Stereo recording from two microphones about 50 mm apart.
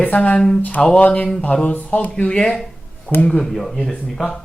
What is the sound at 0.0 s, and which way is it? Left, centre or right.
Speech, left.